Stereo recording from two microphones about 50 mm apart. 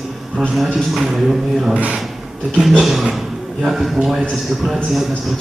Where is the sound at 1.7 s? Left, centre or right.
Right.